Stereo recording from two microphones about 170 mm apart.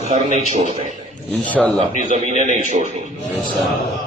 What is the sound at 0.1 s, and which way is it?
Speech, 40° right (ahead or behind).